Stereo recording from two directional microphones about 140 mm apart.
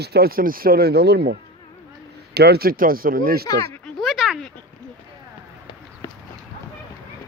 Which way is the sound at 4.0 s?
Centre (ahead or behind).